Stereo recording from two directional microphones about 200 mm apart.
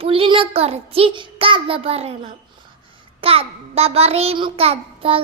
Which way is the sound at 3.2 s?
30° right (ahead or behind).